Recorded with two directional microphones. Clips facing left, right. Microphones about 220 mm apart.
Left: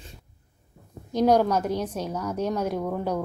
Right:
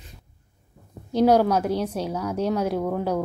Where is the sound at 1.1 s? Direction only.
10° right (ahead or behind).